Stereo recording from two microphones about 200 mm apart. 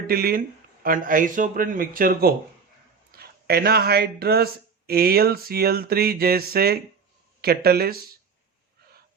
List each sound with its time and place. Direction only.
0.1 s speech: 50° right (ahead or behind)